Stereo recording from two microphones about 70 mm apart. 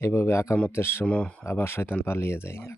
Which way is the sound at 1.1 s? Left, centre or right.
Centre.